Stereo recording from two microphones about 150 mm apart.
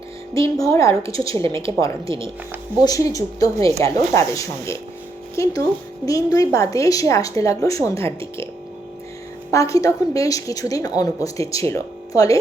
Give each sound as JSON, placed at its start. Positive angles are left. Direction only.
{"t": 0.5, "sound": "a woman's voice", "side_deg": 20}
{"t": 9.5, "sound": "a woman's voice", "side_deg": 20}